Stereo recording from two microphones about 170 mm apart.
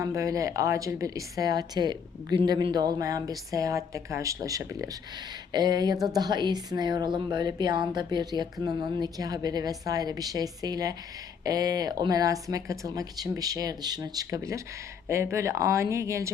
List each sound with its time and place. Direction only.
0.0 s speech: 20° right (ahead or behind)